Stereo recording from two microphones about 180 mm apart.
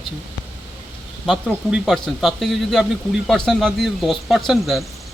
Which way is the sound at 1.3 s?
Centre (ahead or behind).